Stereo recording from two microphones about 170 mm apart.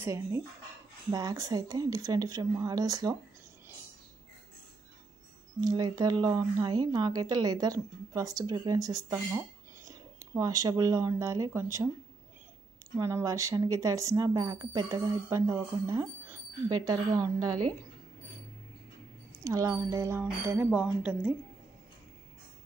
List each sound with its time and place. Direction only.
0.0 s a woman's voice: 15° right (ahead or behind)
5.6 s a woman's voice: 20° right (ahead or behind)
12.9 s a woman's voice: 15° right (ahead or behind)
19.4 s speech: 20° right (ahead or behind)